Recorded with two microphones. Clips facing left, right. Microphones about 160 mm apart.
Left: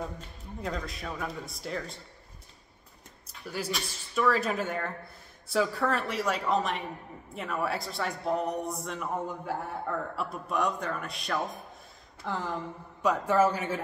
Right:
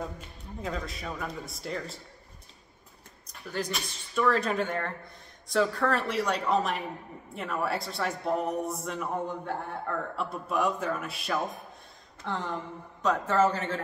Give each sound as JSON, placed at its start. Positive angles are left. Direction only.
{"t": 0.0, "sound": "a man's voice", "side_deg": 0}
{"t": 3.3, "sound": "a man's voice", "side_deg": 5}